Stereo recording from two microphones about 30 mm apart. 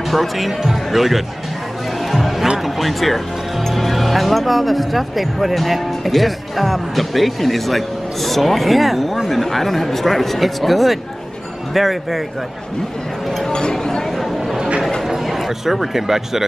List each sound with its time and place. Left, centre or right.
0.1 s speech: centre
2.0 s music: centre
2.6 s speech: centre
13.5 s speech: left
15.2 s speech: centre